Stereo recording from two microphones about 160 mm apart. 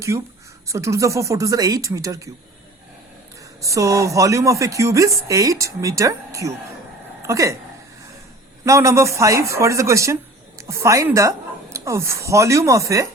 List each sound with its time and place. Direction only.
0.1 s speech: 20° right (ahead or behind)
3.6 s speech: 20° right (ahead or behind)
8.6 s a woman's voice: 20° right (ahead or behind)